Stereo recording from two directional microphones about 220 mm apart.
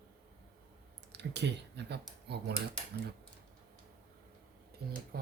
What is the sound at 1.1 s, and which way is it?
Speech, 50° right (ahead or behind).